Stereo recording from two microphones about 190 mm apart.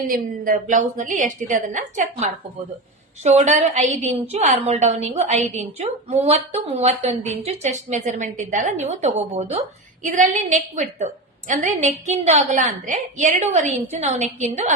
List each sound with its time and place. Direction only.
0.1 s a woman's voice: 45° right (ahead or behind)
3.2 s a woman's voice: 35° right (ahead or behind)